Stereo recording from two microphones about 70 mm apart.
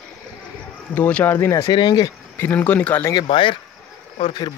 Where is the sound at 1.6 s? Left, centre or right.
Left.